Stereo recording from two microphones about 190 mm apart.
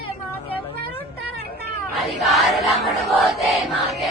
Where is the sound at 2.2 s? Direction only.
Centre (ahead or behind).